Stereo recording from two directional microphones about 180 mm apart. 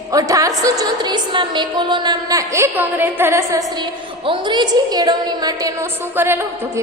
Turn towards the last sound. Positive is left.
turn(degrees=-15)  # may be behind; listen again after turning